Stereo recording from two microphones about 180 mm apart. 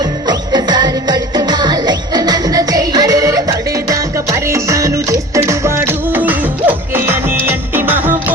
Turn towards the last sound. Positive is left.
turn(degrees=-10)  # may be behind; listen again after turning